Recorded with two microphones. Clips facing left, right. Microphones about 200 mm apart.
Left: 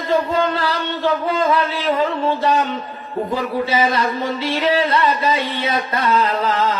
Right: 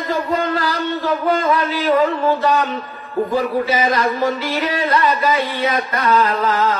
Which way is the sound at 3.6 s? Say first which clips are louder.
Right 1 dB; 30° left (ahead or behind).